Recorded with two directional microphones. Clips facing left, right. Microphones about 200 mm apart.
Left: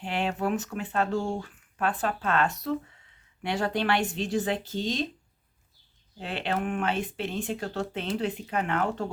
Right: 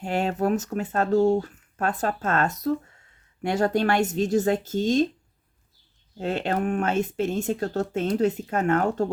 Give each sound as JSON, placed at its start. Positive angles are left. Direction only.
{"t": 0.0, "sound": "speech", "side_deg": -45}
{"t": 6.1, "sound": "speech", "side_deg": -45}